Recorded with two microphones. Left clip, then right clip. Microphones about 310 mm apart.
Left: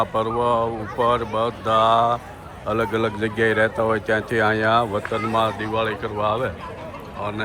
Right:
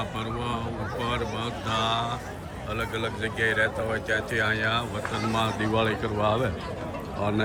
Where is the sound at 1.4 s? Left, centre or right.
Centre.